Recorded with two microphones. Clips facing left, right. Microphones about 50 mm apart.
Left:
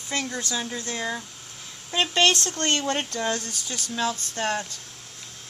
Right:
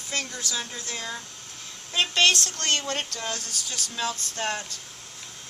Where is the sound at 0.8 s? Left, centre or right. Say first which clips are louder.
Left 5 dB; centre.